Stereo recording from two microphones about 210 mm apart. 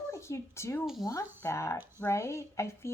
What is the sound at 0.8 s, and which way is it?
Speech, centre (ahead or behind).